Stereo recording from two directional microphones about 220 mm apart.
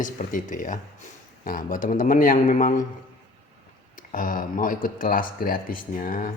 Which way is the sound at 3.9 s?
40° left (ahead or behind).